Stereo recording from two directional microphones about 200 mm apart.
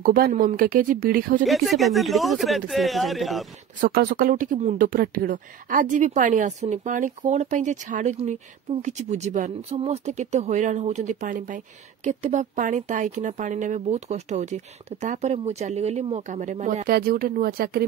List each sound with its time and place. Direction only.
0.0 s speech: 45° right (ahead or behind)
1.4 s speech: centre (ahead or behind)
3.8 s speech: 45° right (ahead or behind)